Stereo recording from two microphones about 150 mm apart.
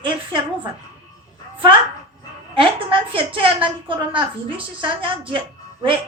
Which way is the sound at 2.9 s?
35° right (ahead or behind).